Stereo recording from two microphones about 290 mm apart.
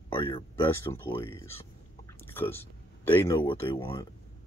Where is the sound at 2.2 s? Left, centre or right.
Centre.